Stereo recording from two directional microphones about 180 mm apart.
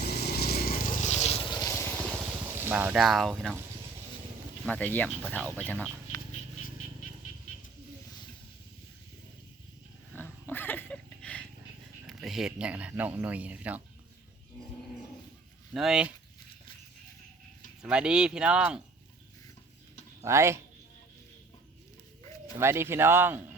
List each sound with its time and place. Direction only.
0.0 s a sound: 60° left (ahead or behind); by 2.0 s 10° left (ahead or behind)
2.0 s a sound: 10° right (ahead or behind)
4.6 s speech: 10° left (ahead or behind)
10.1 s a sound: 10° left (ahead or behind)
12.0 s speech: centre (ahead or behind)
15.7 s speech: centre (ahead or behind)
17.8 s speech: 5° right (ahead or behind)
20.2 s speech: 15° right (ahead or behind)
22.5 s speech: 15° right (ahead or behind)